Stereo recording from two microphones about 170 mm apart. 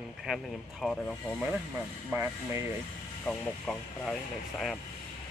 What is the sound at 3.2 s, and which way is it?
Speech, 5° left (ahead or behind).